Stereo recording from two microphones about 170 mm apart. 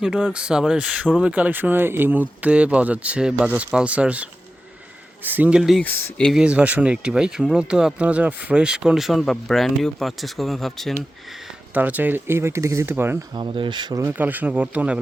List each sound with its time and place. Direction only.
0.0 s speech: 5° right (ahead or behind)
5.8 s speech: 10° left (ahead or behind)
11.7 s speech: 10° right (ahead or behind)
13.3 s speech: 30° right (ahead or behind)
14.0 s speech: 10° right (ahead or behind)